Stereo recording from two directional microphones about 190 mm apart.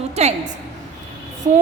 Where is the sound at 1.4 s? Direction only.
40° right (ahead or behind).